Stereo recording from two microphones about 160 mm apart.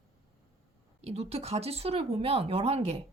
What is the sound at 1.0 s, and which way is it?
Speech, 40° right (ahead or behind).